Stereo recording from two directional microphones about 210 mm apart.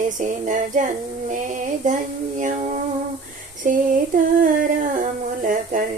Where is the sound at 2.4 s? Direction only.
35° right (ahead or behind).